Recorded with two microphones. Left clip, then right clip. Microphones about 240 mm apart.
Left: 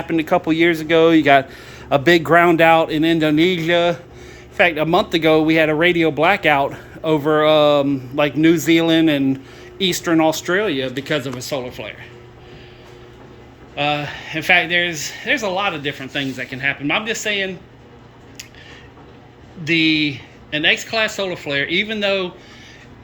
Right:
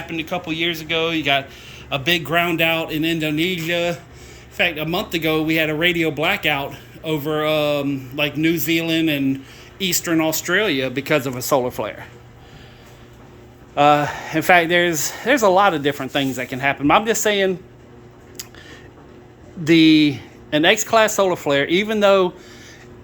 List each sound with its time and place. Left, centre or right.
0.1 s speech: centre
13.7 s speech: centre
19.6 s speech: right